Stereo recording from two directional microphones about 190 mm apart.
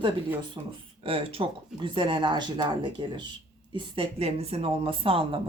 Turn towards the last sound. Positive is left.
turn(degrees=-30)  # may be behind; listen again after turning